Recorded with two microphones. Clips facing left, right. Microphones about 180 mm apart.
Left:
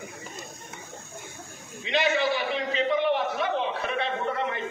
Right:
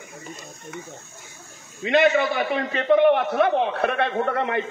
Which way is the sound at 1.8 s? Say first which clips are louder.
Right 7 dB; 55° right (ahead or behind).